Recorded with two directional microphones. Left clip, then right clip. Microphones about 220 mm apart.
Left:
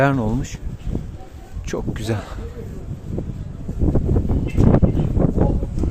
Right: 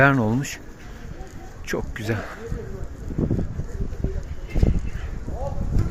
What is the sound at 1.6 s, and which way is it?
Speech, 15° left (ahead or behind).